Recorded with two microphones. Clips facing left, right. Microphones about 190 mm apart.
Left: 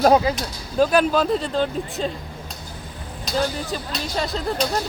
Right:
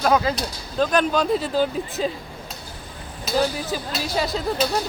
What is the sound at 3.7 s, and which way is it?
Speech, 5° right (ahead or behind).